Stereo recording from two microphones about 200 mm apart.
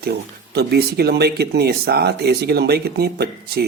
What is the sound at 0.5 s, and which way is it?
Speech, 55° right (ahead or behind).